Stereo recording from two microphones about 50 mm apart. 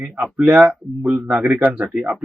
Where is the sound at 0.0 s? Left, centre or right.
Right.